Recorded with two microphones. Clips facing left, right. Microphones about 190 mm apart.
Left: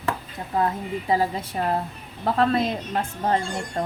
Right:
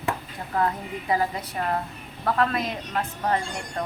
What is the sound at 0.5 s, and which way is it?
A woman's voice, 25° left (ahead or behind).